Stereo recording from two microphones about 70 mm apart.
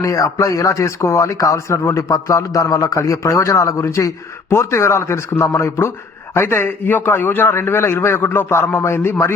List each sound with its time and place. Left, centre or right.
0.0 s a man's voice: left